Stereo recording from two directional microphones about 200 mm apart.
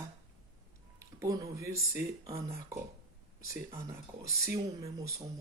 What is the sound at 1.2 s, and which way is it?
Speech, 15° right (ahead or behind).